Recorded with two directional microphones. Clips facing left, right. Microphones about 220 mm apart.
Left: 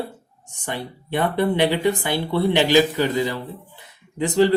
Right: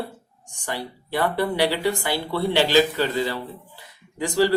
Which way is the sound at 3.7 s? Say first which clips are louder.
Left 5 dB; 20° left (ahead or behind).